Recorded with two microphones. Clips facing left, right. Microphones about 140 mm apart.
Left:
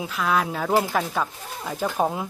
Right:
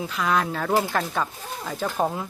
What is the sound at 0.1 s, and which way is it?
Speech, centre (ahead or behind).